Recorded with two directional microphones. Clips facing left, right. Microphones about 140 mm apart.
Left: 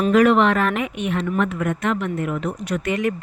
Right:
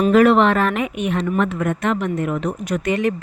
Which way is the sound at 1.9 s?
25° right (ahead or behind).